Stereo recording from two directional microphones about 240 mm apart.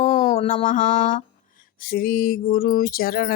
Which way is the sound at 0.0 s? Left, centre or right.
Left.